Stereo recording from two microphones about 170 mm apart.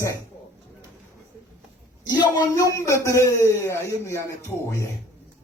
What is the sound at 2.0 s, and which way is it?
Speech, 25° left (ahead or behind).